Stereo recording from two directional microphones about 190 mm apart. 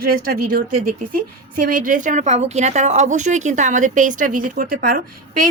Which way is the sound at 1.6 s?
45° right (ahead or behind).